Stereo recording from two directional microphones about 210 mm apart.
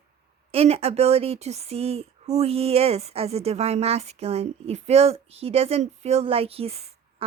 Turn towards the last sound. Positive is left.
turn(degrees=-30)  # may be behind; listen again after turning